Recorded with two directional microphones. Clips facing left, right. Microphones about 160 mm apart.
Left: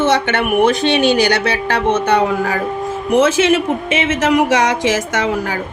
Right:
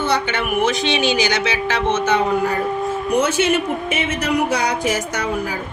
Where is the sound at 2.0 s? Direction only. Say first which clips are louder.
Left 3 dB; 80° left.